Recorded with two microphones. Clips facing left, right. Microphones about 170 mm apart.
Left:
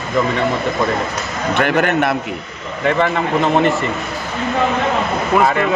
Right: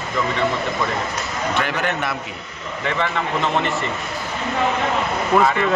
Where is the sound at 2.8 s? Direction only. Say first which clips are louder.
Left 7 dB; 45° left (ahead or behind).